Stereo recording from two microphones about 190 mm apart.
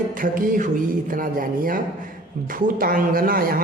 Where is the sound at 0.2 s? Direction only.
45° right (ahead or behind).